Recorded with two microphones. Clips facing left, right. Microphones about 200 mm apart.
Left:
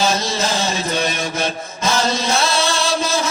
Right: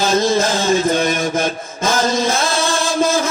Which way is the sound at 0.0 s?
50° right (ahead or behind).